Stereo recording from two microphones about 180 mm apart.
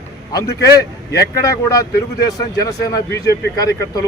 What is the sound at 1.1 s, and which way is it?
Speech, 20° left (ahead or behind).